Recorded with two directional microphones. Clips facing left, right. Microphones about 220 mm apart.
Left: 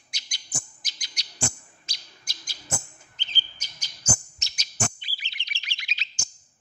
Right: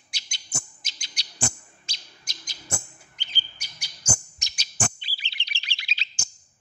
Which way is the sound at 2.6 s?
10° right (ahead or behind).